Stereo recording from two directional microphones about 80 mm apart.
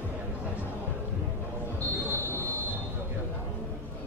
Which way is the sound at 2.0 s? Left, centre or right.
Right.